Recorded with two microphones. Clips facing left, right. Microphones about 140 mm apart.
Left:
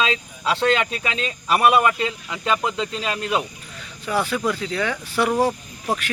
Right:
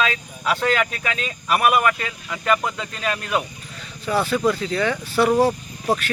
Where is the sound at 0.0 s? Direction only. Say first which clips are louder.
Even; 25° left (ahead or behind).